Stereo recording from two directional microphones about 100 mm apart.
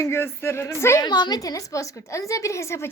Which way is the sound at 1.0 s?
45° left (ahead or behind).